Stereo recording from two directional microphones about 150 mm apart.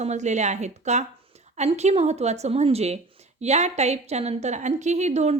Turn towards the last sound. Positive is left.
turn(degrees=-50)  # may be behind; listen again after turning